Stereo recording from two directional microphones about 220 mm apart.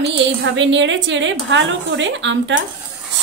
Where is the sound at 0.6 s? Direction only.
55° right (ahead or behind).